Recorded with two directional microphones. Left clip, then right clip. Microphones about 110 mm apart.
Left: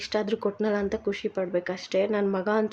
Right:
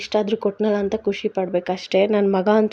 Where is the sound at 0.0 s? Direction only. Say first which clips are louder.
Right 6 dB; 30° right (ahead or behind).